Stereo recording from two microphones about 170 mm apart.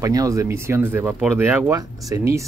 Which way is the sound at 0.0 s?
20° right (ahead or behind).